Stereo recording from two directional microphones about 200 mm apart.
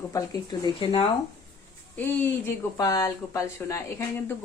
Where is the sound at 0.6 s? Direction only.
25° left (ahead or behind).